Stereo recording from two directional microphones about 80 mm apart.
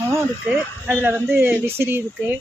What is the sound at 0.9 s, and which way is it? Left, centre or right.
Speech, right.